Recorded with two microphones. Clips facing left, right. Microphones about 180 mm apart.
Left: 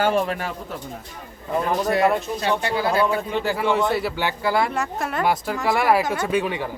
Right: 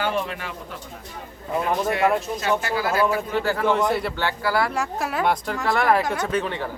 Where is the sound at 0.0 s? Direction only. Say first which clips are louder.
Left 5 dB; 45° left (ahead or behind).